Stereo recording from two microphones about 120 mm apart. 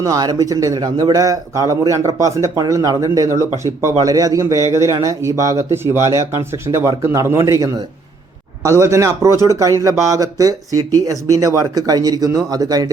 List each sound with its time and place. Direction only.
0.0 s a man's voice: 30° right (ahead or behind)